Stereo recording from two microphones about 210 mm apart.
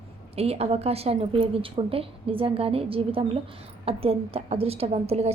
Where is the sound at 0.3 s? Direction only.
30° right (ahead or behind).